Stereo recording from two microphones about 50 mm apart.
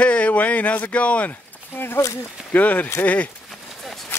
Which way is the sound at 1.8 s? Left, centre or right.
Left.